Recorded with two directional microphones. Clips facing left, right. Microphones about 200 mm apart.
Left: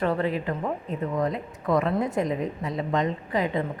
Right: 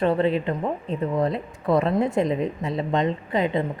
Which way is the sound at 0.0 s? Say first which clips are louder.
Right 4 dB; 25° right (ahead or behind).